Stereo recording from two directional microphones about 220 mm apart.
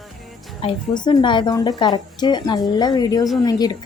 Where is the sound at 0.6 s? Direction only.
20° left (ahead or behind).